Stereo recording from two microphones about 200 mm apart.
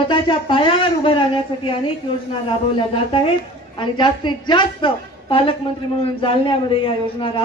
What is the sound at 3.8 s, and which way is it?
A woman's voice, 25° left (ahead or behind).